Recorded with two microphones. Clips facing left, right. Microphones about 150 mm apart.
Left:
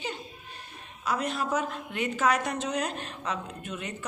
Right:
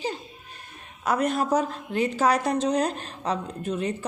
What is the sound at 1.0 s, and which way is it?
A woman's voice, 50° right (ahead or behind).